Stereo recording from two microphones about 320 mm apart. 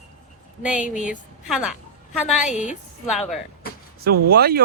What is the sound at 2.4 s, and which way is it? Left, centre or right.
Speech, left.